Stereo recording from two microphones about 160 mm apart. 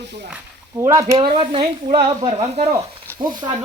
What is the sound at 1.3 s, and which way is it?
Speech, 35° right (ahead or behind).